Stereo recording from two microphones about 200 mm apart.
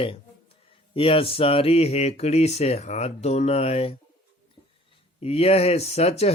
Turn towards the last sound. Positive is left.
turn(degrees=30)  # may be behind; listen again after turning